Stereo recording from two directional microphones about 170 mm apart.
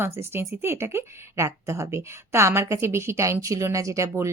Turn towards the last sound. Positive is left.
turn(degrees=-15)  # may be behind; listen again after turning